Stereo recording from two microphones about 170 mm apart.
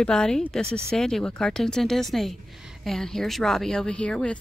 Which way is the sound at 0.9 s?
5° left (ahead or behind).